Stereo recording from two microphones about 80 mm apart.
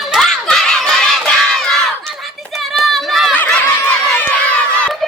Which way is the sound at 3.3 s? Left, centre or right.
Centre.